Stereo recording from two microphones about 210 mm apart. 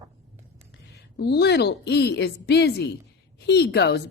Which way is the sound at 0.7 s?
55° left (ahead or behind).